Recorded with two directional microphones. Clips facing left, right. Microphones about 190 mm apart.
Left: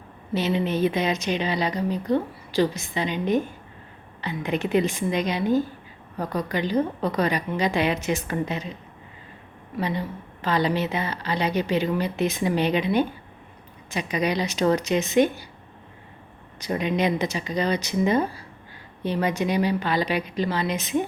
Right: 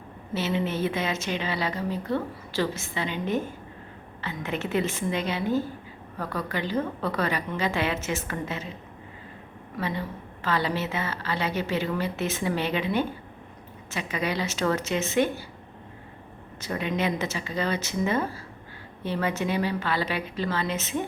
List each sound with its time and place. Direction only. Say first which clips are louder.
0.3 s speech: left 4 dB; 15° left (ahead or behind)
9.7 s speech: left 3 dB; 15° left (ahead or behind)
16.6 s speech: left 4 dB; 15° left (ahead or behind)